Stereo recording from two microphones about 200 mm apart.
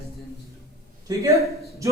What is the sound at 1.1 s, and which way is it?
Speech, 20° right (ahead or behind).